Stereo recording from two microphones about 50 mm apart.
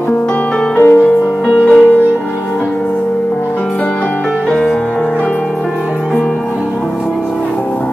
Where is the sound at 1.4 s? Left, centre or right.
Centre.